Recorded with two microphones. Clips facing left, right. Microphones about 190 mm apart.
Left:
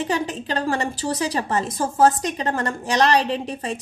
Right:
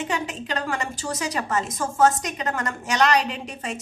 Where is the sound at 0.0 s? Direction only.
35° left (ahead or behind).